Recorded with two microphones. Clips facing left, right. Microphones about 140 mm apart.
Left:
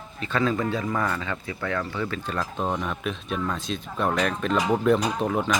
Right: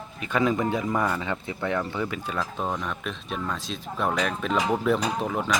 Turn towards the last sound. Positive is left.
turn(degrees=0)  # may be behind; listen again after turning